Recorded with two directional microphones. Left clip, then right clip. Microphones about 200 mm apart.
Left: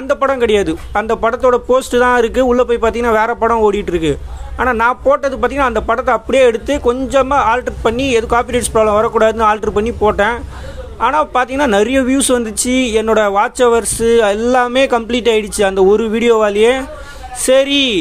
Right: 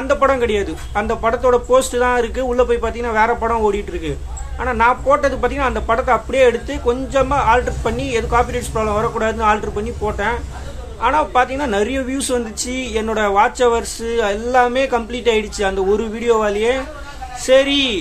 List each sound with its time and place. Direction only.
0.1 s speech: 40° left (ahead or behind)